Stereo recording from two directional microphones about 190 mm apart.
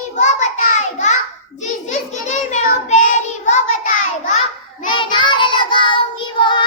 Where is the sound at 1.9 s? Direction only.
40° left (ahead or behind).